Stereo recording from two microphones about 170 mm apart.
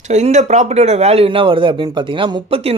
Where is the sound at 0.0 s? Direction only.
45° right (ahead or behind).